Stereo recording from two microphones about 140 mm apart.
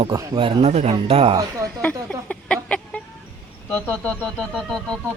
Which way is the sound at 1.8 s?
10° left (ahead or behind).